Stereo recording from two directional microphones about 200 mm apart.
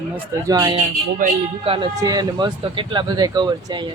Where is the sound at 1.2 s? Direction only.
40° right (ahead or behind).